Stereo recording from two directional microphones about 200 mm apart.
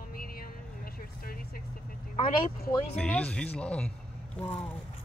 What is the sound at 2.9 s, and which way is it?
A woman's voice, 5° left (ahead or behind).